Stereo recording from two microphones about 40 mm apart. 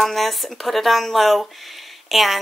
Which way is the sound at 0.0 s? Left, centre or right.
Centre.